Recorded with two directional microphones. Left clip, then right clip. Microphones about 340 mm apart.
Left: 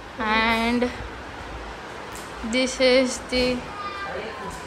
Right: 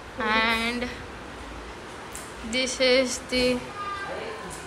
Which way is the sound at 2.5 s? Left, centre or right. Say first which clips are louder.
Left 3 dB; centre.